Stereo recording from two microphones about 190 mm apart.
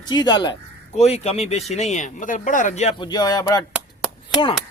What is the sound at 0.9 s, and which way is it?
Speech, 35° left (ahead or behind).